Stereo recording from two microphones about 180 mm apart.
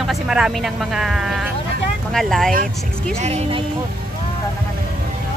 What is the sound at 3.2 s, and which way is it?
Speech, 35° right (ahead or behind).